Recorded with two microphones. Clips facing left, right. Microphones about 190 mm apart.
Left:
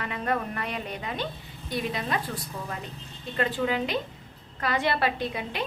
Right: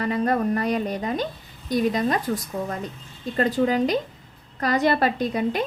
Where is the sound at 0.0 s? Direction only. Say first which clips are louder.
Right 7 dB; 40° right (ahead or behind).